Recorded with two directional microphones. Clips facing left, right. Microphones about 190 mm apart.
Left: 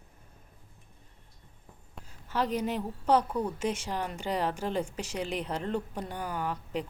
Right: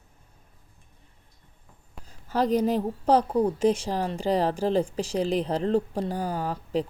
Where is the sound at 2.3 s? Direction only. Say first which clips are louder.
Right 7 dB; 35° right (ahead or behind).